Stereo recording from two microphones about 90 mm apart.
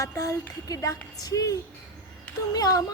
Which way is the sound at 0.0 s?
40° left (ahead or behind).